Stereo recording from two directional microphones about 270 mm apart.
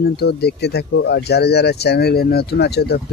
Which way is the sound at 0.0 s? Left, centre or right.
Left.